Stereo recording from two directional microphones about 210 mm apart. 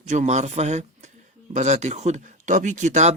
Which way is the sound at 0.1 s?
35° right (ahead or behind).